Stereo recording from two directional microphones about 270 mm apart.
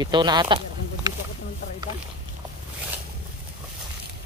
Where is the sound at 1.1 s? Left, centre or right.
Centre.